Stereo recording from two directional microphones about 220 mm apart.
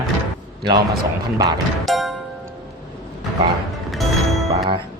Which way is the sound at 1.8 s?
Centre (ahead or behind).